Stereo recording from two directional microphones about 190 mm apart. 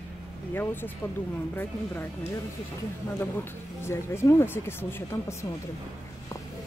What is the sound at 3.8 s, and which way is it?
Speech, 15° left (ahead or behind).